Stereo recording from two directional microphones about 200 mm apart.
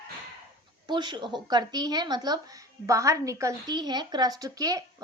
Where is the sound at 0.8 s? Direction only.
25° right (ahead or behind).